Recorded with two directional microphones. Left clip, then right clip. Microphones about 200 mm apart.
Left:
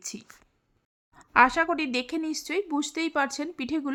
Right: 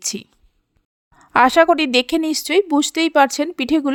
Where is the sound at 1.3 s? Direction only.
40° right (ahead or behind).